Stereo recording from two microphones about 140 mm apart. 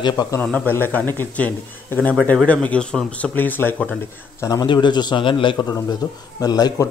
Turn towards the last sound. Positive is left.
turn(degrees=30)  # may be behind; listen again after turning